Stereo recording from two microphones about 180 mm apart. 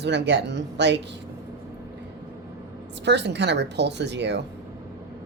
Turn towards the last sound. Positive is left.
turn(degrees=-70)  # may be behind; listen again after turning